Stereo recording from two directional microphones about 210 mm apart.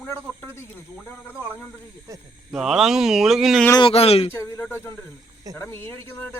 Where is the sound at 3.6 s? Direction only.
20° left (ahead or behind).